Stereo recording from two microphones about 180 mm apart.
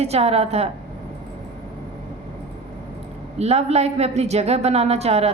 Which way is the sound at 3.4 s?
35° right (ahead or behind).